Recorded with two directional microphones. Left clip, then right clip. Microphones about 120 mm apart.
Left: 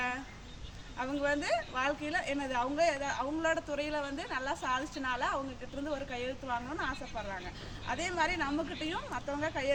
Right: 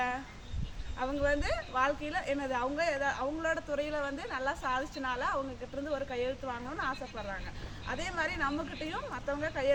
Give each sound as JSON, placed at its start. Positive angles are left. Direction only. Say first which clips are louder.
{"t": 0.9, "sound": "a woman's voice", "louder": "right 2 dB", "side_deg": -25}